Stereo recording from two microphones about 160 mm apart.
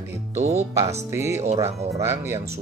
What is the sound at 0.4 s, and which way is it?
Speech, 45° right (ahead or behind).